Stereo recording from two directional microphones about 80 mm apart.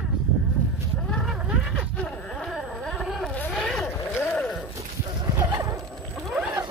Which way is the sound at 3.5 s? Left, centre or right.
Centre.